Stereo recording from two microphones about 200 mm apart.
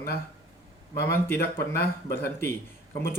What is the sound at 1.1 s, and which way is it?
Speech, 10° left (ahead or behind).